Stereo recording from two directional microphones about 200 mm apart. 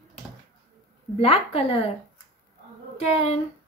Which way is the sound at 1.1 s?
30° left (ahead or behind).